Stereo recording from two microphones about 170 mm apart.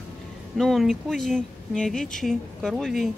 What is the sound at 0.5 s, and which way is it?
Speech, centre (ahead or behind).